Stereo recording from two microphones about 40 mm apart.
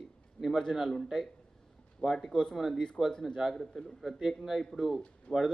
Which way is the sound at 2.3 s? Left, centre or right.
Centre.